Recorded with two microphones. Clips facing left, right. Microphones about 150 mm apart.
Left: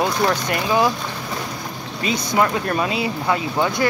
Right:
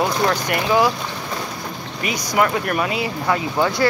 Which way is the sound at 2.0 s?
25° left (ahead or behind).